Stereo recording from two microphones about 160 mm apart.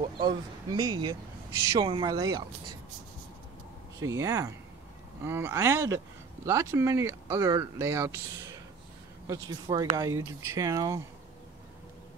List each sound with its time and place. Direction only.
0.2 s speech: 25° right (ahead or behind)
4.0 s speech: 20° right (ahead or behind)